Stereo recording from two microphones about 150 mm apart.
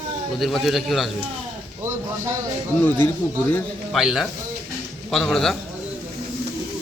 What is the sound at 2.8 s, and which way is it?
Speech, 15° left (ahead or behind).